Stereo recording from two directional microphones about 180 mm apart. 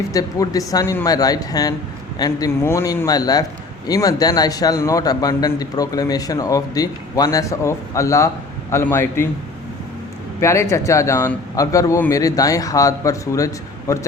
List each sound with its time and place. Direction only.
0.1 s a man's voice: 20° left (ahead or behind)
10.4 s speech: 15° left (ahead or behind)